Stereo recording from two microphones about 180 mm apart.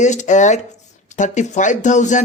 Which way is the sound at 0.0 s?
40° left (ahead or behind).